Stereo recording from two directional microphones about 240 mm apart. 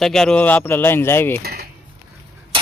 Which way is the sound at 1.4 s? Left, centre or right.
Right.